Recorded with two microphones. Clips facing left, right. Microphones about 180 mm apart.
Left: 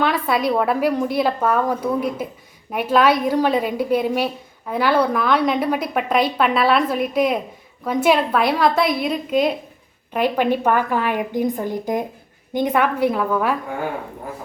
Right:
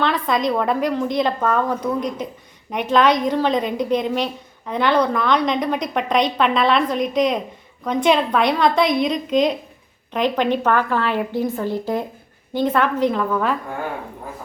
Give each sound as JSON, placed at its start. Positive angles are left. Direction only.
{"t": 0.0, "sound": "a woman's voice", "side_deg": 10}